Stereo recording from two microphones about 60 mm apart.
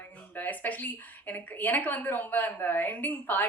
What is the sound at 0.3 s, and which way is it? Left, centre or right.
A woman's voice, left.